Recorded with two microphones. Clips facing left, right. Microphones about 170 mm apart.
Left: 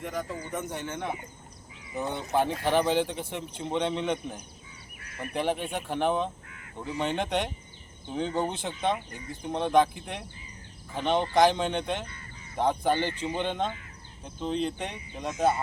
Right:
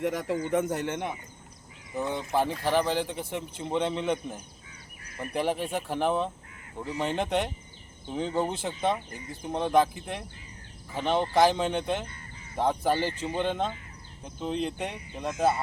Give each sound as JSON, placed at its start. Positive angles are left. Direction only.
{"t": 0.0, "sound": "speech", "side_deg": -90}
{"t": 1.9, "sound": "a man's voice", "side_deg": 0}